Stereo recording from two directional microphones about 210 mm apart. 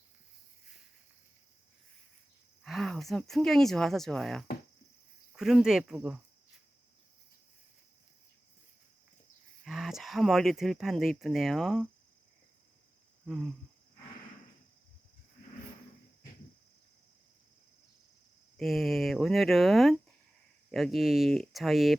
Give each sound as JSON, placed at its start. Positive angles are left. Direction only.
{"t": 2.6, "sound": "speech", "side_deg": 0}
{"t": 9.6, "sound": "speech", "side_deg": 0}
{"t": 18.5, "sound": "speech", "side_deg": 0}